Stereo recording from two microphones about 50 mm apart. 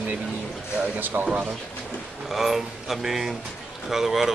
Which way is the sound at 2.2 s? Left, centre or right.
Centre.